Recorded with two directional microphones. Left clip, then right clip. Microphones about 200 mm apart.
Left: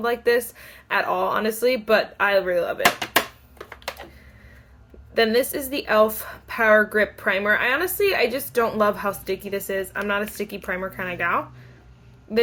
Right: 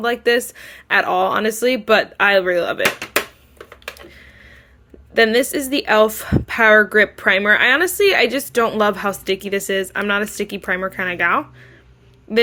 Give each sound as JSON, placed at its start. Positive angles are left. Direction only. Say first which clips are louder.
{"t": 0.0, "sound": "a woman's voice", "louder": "right 4 dB", "side_deg": -35}
{"t": 5.1, "sound": "a woman's voice", "louder": "right 5 dB", "side_deg": -35}